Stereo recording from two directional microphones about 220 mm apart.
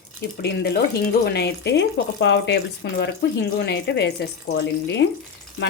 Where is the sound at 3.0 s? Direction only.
50° left (ahead or behind).